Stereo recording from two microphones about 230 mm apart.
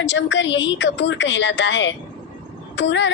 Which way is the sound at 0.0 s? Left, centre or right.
Left.